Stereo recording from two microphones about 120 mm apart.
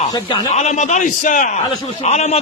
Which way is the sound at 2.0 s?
70° left (ahead or behind).